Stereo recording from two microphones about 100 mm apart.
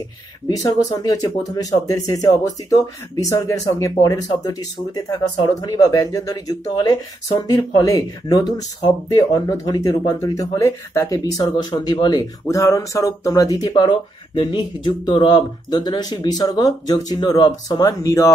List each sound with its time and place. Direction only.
0.5 s speech: 40° left (ahead or behind)
11.5 s speech: 50° left (ahead or behind)
12.4 s speech: 30° left (ahead or behind)
17.8 s speech: 30° left (ahead or behind)